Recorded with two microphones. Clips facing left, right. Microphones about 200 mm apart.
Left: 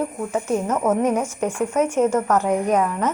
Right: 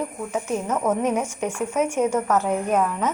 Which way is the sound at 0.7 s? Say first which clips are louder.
Left 2 dB; 10° left (ahead or behind).